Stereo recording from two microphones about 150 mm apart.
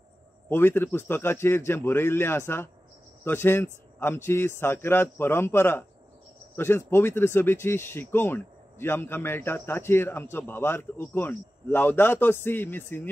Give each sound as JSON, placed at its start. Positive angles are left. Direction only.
{"t": 0.5, "sound": "speech", "side_deg": 15}